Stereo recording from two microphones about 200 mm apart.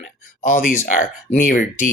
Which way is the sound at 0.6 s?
40° left (ahead or behind).